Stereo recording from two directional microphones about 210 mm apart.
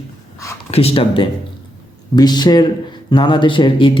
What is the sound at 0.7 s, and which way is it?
Speech, 30° left (ahead or behind).